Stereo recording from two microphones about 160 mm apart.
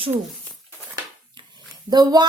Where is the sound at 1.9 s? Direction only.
25° right (ahead or behind).